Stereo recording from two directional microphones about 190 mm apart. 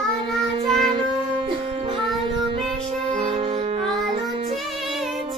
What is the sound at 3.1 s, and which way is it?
Music, 30° right (ahead or behind).